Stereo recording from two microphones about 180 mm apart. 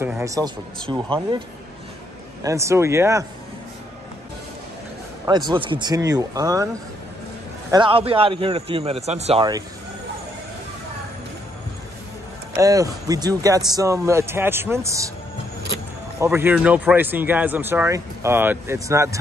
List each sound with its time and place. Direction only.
0.2 s speech: 20° right (ahead or behind)
2.4 s speech: 15° right (ahead or behind)
5.2 s speech: 25° right (ahead or behind)
7.7 s speech: 30° right (ahead or behind)
12.5 s speech: 20° right (ahead or behind)
16.2 s speech: 15° right (ahead or behind)